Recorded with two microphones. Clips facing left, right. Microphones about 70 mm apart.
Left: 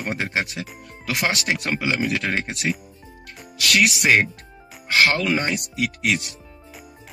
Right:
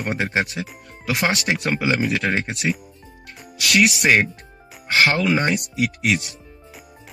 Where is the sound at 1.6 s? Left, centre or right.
Centre.